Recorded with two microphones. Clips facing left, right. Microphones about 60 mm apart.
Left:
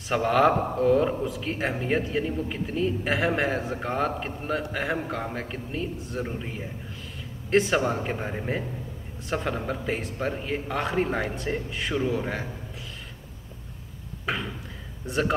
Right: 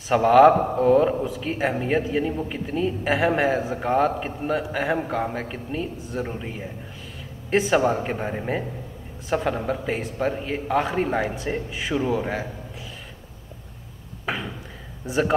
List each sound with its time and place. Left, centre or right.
0.1 s a man's voice: centre
14.2 s a man's voice: centre